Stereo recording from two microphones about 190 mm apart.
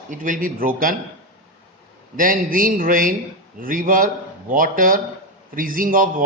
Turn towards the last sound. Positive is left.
turn(degrees=-45)  # may be behind; listen again after turning